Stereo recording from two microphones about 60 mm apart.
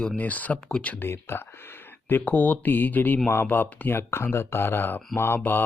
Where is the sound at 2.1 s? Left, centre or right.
Left.